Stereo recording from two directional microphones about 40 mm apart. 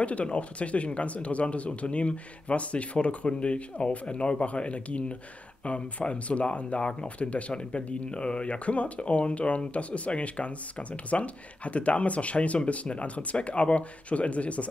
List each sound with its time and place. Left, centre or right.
0.0 s speech: left